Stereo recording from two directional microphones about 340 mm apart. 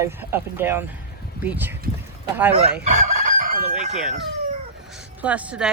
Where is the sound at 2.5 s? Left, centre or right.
Right.